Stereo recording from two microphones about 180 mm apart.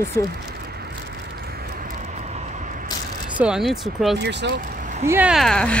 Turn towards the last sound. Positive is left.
turn(degrees=5)  # may be behind; listen again after turning